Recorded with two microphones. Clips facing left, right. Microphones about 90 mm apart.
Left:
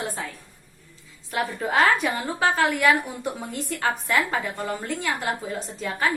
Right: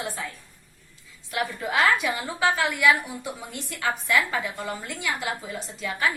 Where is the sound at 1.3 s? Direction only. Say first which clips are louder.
Left 2 dB; 40° left (ahead or behind).